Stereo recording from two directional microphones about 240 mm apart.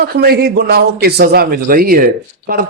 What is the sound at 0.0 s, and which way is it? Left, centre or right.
A man's voice, right.